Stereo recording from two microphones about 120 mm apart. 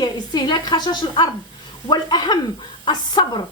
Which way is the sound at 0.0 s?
35° left (ahead or behind).